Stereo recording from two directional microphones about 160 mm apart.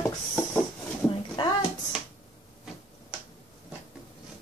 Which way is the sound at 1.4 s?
30° left (ahead or behind).